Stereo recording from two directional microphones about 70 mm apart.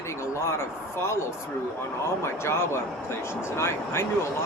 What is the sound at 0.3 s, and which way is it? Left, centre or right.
Speech, left.